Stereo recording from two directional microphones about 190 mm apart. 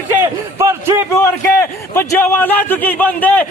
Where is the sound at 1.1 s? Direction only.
15° left (ahead or behind).